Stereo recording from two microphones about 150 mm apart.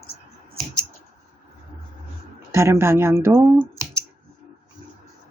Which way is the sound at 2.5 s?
20° right (ahead or behind).